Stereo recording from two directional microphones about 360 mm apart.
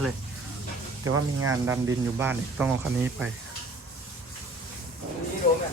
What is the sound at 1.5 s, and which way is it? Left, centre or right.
Speech, centre.